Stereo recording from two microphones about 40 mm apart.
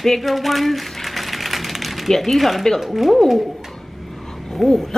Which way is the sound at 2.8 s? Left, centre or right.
Centre.